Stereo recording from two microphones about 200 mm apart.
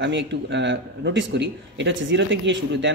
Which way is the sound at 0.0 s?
60° right (ahead or behind).